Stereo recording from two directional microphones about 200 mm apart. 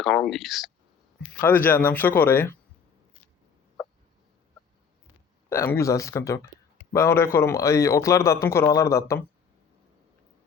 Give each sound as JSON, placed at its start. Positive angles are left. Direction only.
{"t": 0.0, "sound": "speech", "side_deg": 0}
{"t": 1.4, "sound": "a man's voice", "side_deg": 10}
{"t": 5.5, "sound": "a man's voice", "side_deg": 15}